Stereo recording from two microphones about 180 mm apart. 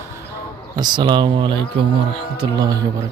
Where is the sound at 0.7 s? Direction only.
25° right (ahead or behind).